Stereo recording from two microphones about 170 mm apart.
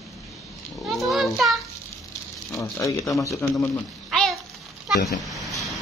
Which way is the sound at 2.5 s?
20° left (ahead or behind).